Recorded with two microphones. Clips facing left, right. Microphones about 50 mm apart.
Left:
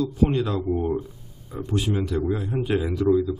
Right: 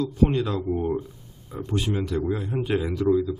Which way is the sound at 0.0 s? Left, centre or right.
Centre.